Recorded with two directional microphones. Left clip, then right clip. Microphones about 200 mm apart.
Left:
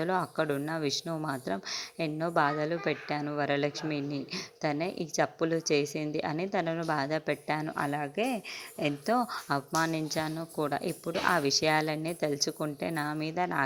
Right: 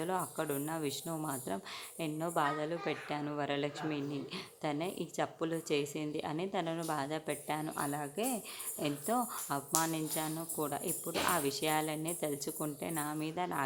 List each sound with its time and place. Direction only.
0.0 s speech: 25° left (ahead or behind)